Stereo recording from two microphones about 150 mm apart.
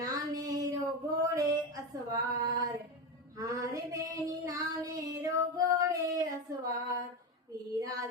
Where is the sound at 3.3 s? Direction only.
25° right (ahead or behind).